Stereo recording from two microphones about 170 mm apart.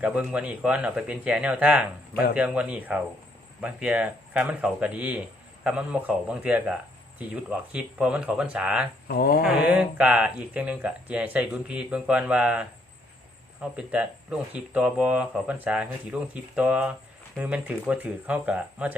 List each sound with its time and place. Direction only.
0.0 s speech: 5° right (ahead or behind)
9.0 s speech: 65° left (ahead or behind)
9.4 s speech: 5° right (ahead or behind)